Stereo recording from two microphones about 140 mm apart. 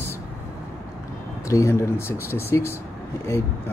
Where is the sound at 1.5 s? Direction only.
20° left (ahead or behind).